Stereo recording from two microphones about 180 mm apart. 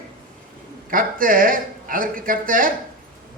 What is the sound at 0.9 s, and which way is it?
A man's voice, 50° right (ahead or behind).